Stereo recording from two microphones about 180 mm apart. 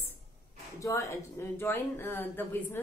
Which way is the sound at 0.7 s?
15° left (ahead or behind).